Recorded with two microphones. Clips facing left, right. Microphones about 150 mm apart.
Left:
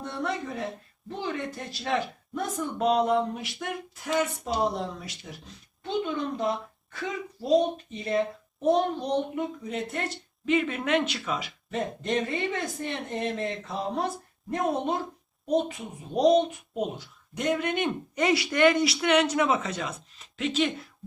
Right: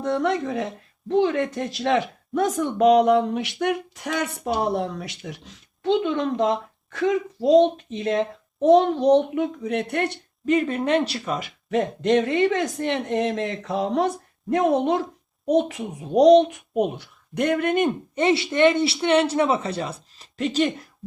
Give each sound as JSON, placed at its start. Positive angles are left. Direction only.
{"t": 0.0, "sound": "speech", "side_deg": -85}
{"t": 10.4, "sound": "speech", "side_deg": -40}
{"t": 11.7, "sound": "speech", "side_deg": -85}
{"t": 16.0, "sound": "speech", "side_deg": -90}
{"t": 16.4, "sound": "speech", "side_deg": -70}
{"t": 18.1, "sound": "speech", "side_deg": -25}